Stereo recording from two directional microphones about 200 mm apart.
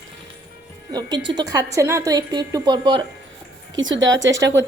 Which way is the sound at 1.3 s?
20° right (ahead or behind).